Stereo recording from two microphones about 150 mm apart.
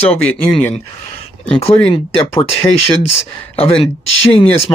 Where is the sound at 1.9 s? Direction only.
35° left (ahead or behind).